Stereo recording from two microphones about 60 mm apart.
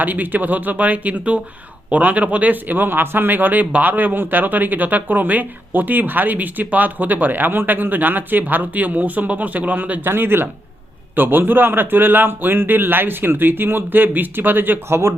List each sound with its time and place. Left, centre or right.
0.0 s speech: right
10.1 s speech: right